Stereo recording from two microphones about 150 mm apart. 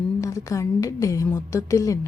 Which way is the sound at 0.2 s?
20° left (ahead or behind).